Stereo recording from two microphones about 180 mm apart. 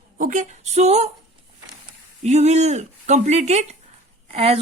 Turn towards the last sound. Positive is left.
turn(degrees=-35)  # may be behind; listen again after turning